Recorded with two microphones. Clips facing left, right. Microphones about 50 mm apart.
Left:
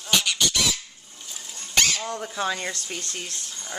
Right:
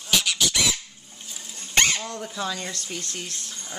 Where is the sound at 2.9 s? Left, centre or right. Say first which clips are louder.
Even; centre.